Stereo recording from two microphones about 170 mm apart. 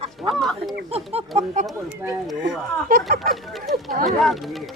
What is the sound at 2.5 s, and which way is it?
Speech, 65° right (ahead or behind).